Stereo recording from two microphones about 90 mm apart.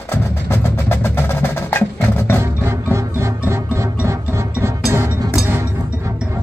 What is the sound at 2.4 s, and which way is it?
Music, 30° right (ahead or behind).